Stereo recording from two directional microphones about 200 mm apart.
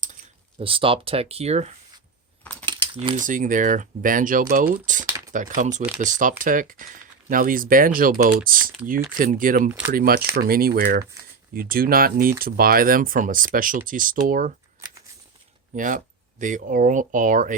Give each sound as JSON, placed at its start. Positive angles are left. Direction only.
{"t": 0.6, "sound": "speech", "side_deg": -25}
{"t": 2.4, "sound": "typing", "side_deg": 5}
{"t": 2.6, "sound": "typing", "side_deg": -25}
{"t": 3.2, "sound": "speech", "side_deg": -40}
{"t": 4.7, "sound": "typing", "side_deg": -40}
{"t": 5.5, "sound": "speech", "side_deg": -40}
{"t": 15.7, "sound": "speech", "side_deg": -40}